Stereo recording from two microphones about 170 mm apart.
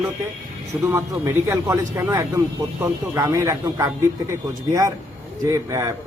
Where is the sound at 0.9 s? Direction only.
20° right (ahead or behind).